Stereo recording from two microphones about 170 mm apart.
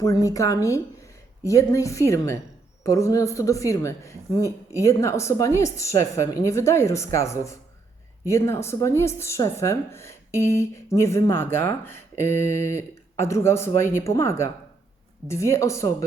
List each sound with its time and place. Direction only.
0.0 s a woman's voice: 20° left (ahead or behind)